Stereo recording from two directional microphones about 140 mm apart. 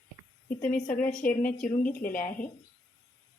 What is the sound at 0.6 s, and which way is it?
Speech, 10° left (ahead or behind).